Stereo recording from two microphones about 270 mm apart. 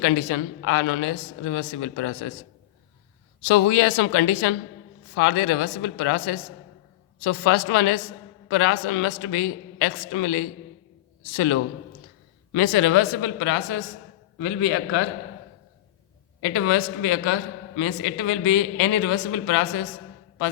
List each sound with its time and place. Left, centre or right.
0.0 s a man's voice: left
3.5 s a man's voice: left
16.4 s a man's voice: left